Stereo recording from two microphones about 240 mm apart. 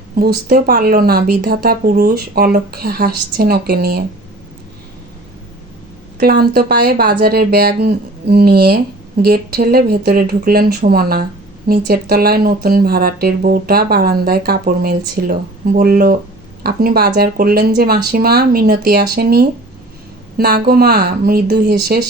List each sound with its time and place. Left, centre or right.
0.2 s speech: right
6.1 s speech: right